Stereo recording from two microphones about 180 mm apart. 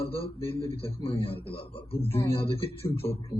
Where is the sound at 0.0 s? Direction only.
30° left (ahead or behind).